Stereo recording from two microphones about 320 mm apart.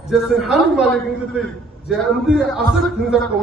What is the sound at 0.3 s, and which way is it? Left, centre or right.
A man's voice, centre.